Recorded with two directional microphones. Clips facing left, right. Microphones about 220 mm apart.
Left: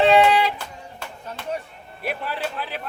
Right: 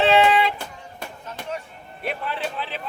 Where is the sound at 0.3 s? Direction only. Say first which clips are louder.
Even; centre (ahead or behind).